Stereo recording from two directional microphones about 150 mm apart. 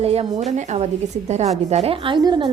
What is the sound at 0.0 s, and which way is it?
A woman's voice, 45° right (ahead or behind).